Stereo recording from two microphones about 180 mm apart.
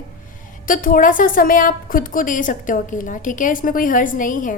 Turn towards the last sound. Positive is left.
turn(degrees=45)  # may be behind; listen again after turning